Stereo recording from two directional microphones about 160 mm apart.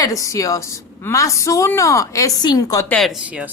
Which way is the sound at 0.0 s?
20° left (ahead or behind).